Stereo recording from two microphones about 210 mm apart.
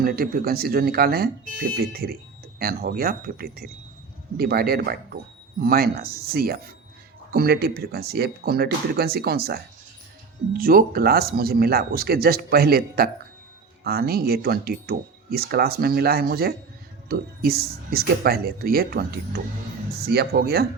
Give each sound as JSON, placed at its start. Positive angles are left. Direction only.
{"t": 0.0, "sound": "speech", "side_deg": -45}